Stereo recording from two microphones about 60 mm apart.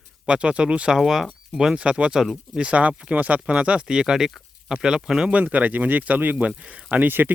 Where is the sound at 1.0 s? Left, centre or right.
Centre.